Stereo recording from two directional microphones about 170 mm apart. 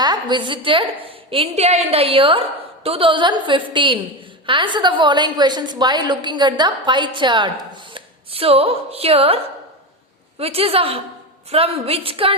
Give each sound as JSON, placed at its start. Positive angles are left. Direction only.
{"t": 0.0, "sound": "a woman's voice", "side_deg": -25}